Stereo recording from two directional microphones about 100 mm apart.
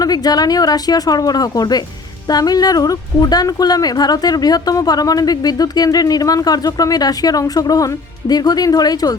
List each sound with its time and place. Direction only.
0.0 s speech: 40° left (ahead or behind)